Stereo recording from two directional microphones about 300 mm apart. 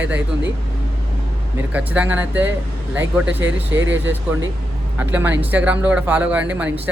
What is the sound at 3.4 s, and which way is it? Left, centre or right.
Speech, right.